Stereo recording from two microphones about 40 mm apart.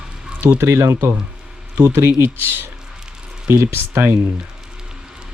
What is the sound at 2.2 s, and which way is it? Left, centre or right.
Speech, right.